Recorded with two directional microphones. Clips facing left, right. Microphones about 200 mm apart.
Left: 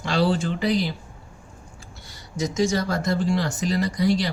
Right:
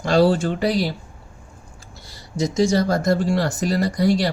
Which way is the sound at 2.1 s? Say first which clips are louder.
Right 4 dB; 35° right (ahead or behind).